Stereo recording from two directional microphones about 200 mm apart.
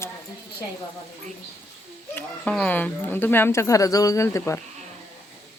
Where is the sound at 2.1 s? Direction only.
5° left (ahead or behind).